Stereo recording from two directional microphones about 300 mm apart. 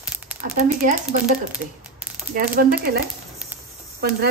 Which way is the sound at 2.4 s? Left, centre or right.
Right.